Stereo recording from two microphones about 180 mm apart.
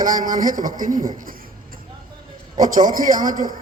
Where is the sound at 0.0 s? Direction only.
50° right (ahead or behind).